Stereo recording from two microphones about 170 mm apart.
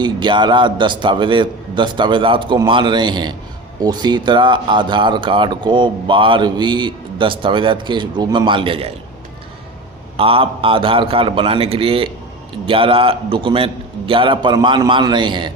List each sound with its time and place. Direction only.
0.0 s speech: 25° right (ahead or behind)
10.2 s a man's voice: 35° right (ahead or behind)